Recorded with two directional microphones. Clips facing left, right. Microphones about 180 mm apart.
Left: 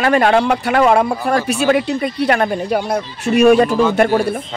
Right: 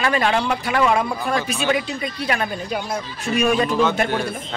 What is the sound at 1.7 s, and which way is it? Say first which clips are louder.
Speech: left 8 dB; 60° left (ahead or behind).